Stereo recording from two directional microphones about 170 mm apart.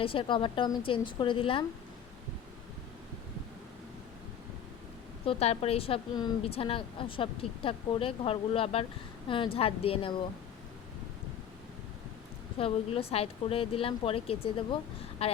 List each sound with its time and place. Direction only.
0.0 s a woman's voice: 30° left (ahead or behind)
5.2 s a woman's voice: 35° left (ahead or behind)
12.5 s a woman's voice: 35° left (ahead or behind)